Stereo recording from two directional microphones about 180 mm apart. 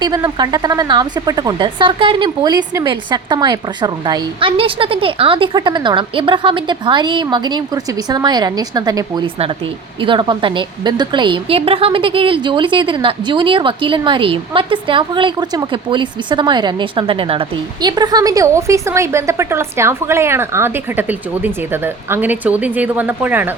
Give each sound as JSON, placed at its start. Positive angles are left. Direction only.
{"t": 0.0, "sound": "a woman's voice", "side_deg": -25}